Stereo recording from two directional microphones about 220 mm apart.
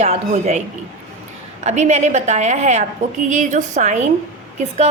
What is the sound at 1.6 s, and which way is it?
A woman's voice, 30° right (ahead or behind).